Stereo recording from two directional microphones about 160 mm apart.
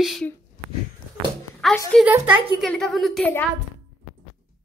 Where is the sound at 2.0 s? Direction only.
10° right (ahead or behind).